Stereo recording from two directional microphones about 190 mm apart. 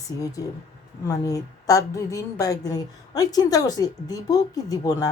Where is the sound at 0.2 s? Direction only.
20° left (ahead or behind).